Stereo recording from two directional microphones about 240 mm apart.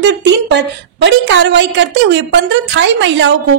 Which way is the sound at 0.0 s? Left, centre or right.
Right.